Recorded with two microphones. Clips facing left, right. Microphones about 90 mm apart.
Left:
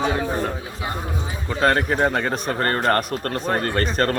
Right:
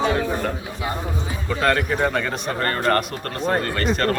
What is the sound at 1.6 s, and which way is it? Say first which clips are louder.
A man's voice: left 2 dB; 30° left (ahead or behind).